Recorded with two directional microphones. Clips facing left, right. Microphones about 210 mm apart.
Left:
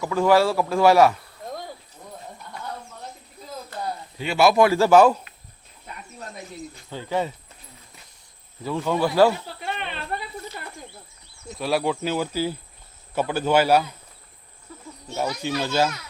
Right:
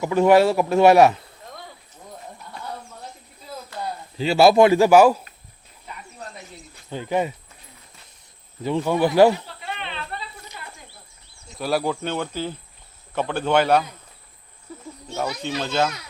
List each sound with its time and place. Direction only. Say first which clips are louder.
0.0 s speech: right 3 dB; 25° right (ahead or behind)
4.2 s speech: right 4 dB; 30° right (ahead or behind); by 5.2 s 10° right (ahead or behind)
6.9 s speech: right 3 dB; 15° right (ahead or behind)
8.6 s speech: right 3 dB; 15° right (ahead or behind)
10.1 s snake: left 4 dB; 45° left (ahead or behind)
11.5 s speech: even; centre (ahead or behind)
15.1 s speech: left 1 dB; 10° left (ahead or behind)